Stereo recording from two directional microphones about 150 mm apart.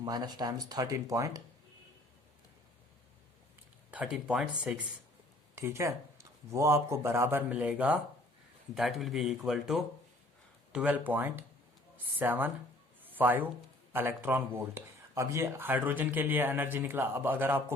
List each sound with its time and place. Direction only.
0.0 s speech: 25° right (ahead or behind)
3.9 s speech: 5° right (ahead or behind)
5.5 s speech: 20° right (ahead or behind)
13.0 s a sound: 10° right (ahead or behind)
13.9 s speech: 15° right (ahead or behind)